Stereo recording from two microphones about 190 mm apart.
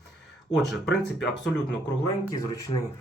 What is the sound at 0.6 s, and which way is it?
Speech, centre (ahead or behind).